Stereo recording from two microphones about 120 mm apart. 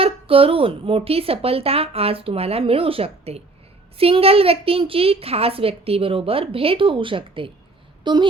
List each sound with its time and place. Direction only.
0.0 s a woman's voice: 50° right (ahead or behind)